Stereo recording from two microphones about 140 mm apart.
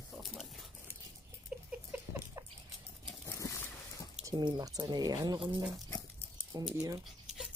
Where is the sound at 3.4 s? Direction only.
20° left (ahead or behind).